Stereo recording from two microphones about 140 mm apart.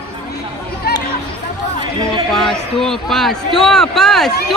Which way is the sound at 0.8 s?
90° left.